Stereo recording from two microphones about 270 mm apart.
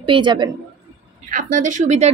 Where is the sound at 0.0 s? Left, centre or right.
Centre.